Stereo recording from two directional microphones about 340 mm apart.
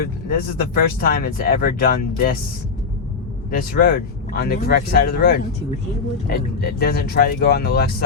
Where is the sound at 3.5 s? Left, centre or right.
Left.